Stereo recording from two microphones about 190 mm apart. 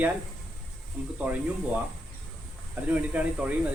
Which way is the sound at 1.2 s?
10° right (ahead or behind).